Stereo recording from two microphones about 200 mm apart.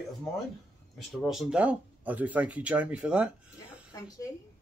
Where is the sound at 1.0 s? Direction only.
Centre (ahead or behind).